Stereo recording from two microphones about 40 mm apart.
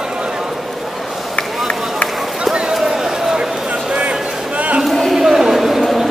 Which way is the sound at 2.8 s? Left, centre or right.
Centre.